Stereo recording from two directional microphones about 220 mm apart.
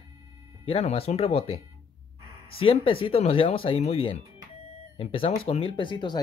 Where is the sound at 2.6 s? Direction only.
25° left (ahead or behind).